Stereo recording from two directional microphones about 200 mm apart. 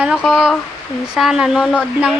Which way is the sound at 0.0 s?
5° right (ahead or behind).